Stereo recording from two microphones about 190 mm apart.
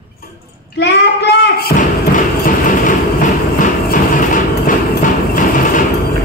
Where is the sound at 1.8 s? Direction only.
45° left (ahead or behind).